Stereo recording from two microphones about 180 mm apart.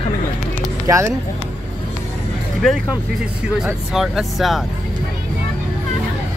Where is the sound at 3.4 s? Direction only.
5° right (ahead or behind).